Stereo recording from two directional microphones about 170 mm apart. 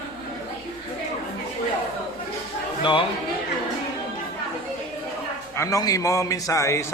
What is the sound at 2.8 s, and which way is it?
Speech, 30° left (ahead or behind).